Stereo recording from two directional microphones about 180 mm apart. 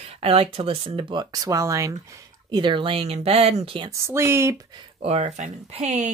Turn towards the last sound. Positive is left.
turn(degrees=-40)  # may be behind; listen again after turning